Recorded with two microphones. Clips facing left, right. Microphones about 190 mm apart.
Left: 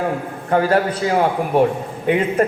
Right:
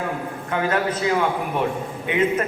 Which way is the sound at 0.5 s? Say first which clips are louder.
Left 6 dB; 40° left (ahead or behind).